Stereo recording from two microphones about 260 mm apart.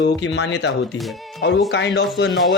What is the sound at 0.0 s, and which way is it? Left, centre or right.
Speech, left.